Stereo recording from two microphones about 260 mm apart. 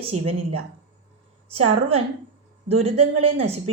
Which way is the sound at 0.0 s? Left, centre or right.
Right.